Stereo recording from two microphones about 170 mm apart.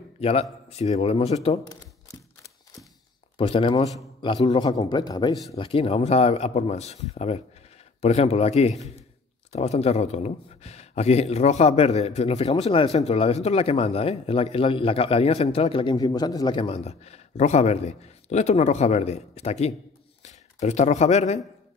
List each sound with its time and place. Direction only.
0.2 s a man's voice: 35° left (ahead or behind)
3.3 s a man's voice: 30° left (ahead or behind)